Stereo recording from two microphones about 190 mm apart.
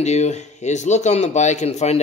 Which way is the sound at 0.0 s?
35° left (ahead or behind).